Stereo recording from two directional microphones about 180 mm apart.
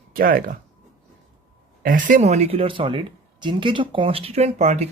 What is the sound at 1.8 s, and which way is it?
Speech, 50° right (ahead or behind).